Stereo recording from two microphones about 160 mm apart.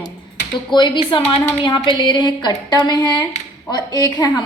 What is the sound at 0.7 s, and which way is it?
A woman's voice, 30° left (ahead or behind).